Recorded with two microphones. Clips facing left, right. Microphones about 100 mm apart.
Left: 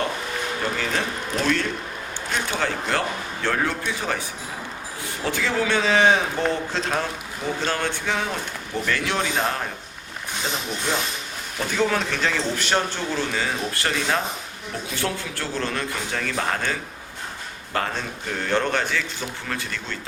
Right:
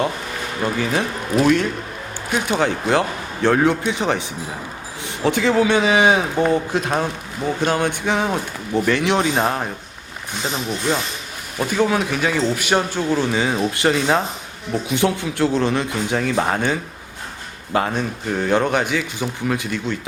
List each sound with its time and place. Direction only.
0.9 s speech: 15° right (ahead or behind)
11.8 s speech: 10° right (ahead or behind)
17.7 s speech: 15° right (ahead or behind)